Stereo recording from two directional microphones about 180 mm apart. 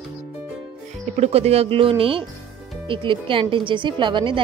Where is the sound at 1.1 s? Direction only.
35° right (ahead or behind).